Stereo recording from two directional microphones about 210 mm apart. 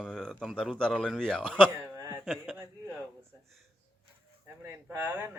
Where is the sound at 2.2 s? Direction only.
Centre (ahead or behind).